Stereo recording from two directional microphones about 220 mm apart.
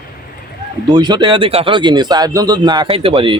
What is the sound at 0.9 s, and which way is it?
Speech, 20° right (ahead or behind).